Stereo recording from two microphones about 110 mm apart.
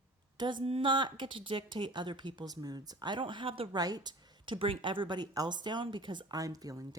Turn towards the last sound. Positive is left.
turn(degrees=-35)  # may be behind; listen again after turning